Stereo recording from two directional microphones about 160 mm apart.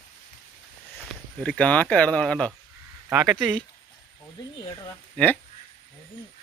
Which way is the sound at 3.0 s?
15° right (ahead or behind).